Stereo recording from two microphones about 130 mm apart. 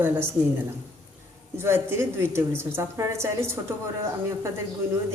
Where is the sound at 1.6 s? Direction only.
20° right (ahead or behind).